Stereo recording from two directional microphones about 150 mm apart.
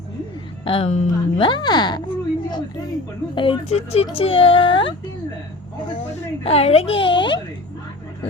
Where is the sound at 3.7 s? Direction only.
45° left (ahead or behind).